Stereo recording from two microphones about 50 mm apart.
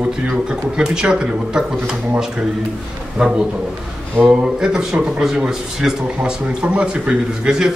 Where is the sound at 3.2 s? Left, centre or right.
Centre.